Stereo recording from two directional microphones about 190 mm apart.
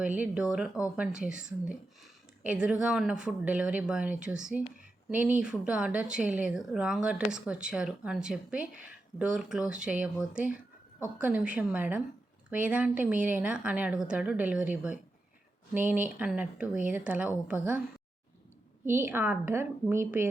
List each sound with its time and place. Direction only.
0.0 s a woman's voice: 5° right (ahead or behind)
18.9 s a woman's voice: 10° right (ahead or behind)